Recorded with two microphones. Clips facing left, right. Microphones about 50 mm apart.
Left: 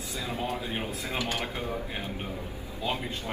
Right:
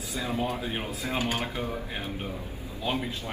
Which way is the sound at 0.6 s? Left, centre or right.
Right.